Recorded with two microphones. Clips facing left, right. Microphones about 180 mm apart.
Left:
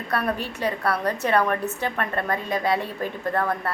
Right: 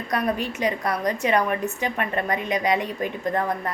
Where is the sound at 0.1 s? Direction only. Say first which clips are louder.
Right 1 dB; 15° right (ahead or behind).